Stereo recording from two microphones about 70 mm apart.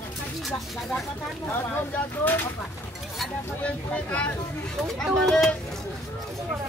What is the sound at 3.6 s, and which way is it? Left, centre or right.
Speech, centre.